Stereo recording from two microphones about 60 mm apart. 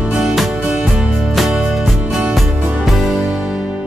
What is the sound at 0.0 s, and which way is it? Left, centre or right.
Music, centre.